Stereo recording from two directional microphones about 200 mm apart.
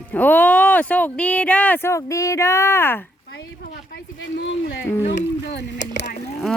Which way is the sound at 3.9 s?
60° left (ahead or behind).